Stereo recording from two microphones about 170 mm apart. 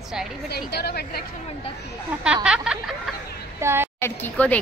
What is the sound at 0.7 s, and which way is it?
Speech, 70° left (ahead or behind).